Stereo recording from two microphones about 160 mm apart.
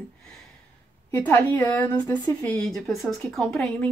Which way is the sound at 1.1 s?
10° left (ahead or behind).